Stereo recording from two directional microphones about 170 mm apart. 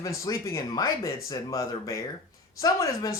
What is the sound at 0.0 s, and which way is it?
Speech, 20° left (ahead or behind).